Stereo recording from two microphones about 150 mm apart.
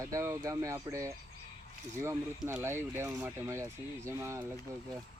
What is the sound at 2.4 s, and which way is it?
Speech, 10° right (ahead or behind).